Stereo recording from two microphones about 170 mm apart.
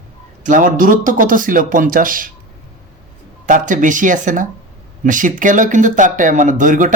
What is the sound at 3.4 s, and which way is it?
Speech, 50° right (ahead or behind).